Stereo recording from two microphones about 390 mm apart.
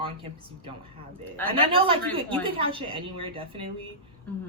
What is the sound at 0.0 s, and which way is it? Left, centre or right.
A woman's voice, centre.